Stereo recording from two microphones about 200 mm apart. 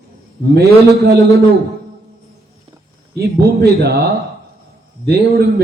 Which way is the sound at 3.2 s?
50° right (ahead or behind).